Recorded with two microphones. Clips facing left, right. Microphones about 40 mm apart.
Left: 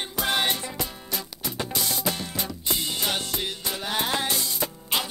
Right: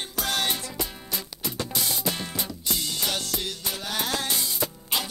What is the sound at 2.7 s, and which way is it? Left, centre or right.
Music, left.